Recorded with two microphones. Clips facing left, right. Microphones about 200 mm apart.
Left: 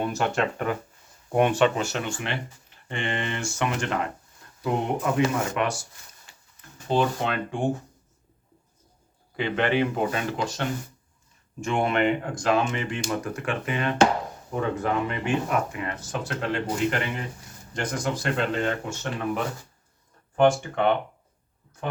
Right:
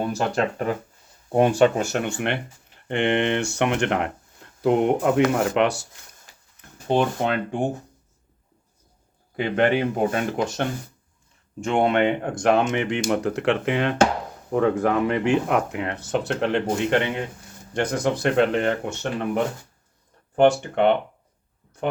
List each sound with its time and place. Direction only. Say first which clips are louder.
0.0 s speech: right 2 dB; 35° right (ahead or behind); by 6.1 s 65° right (ahead or behind)
6.2 s a sound: right 1 dB; 55° right (ahead or behind)
9.3 s speech: right 4 dB; 50° right (ahead or behind)
11.6 s speech: right 4 dB; 60° right (ahead or behind)
20.6 s speech: right 4 dB; 60° right (ahead or behind)